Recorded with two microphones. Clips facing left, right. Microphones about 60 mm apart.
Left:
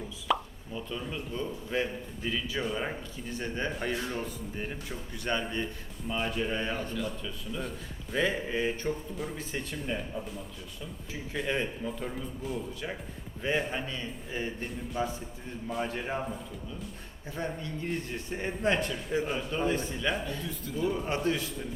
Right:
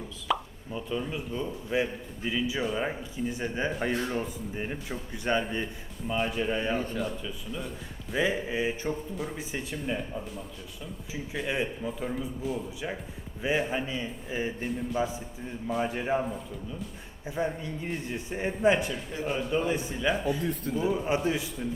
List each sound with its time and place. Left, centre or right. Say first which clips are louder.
0.3 s plop: even; centre
0.7 s a man's voice: right 4 dB; centre
6.7 s speech: right 3 dB; right
7.2 s a man's voice: even; centre
17.2 s a man's voice: right 5 dB; centre
20.4 s speech: right 6 dB; right
20.8 s a man's voice: right 1 dB; centre